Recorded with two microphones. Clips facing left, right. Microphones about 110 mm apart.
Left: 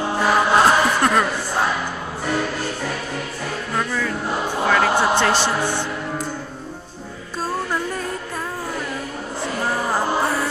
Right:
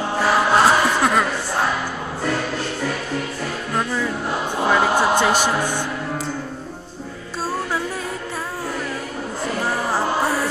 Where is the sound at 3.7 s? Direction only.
15° right (ahead or behind).